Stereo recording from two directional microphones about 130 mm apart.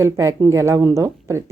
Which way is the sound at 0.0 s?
25° right (ahead or behind).